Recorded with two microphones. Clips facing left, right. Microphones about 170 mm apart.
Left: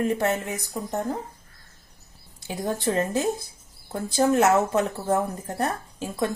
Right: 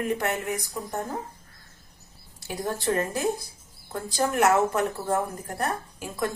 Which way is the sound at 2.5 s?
20° left (ahead or behind).